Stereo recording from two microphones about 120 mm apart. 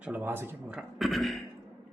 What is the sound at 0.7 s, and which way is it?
Speech, centre (ahead or behind).